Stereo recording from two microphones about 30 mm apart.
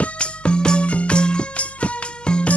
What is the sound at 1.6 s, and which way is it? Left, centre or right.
Music, left.